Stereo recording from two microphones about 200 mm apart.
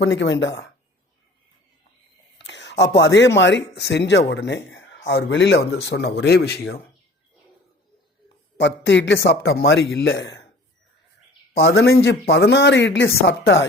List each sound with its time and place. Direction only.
0.0 s speech: 65° left (ahead or behind)
2.5 s speech: 60° left (ahead or behind)
8.5 s speech: 65° left (ahead or behind)
11.6 s speech: 60° left (ahead or behind)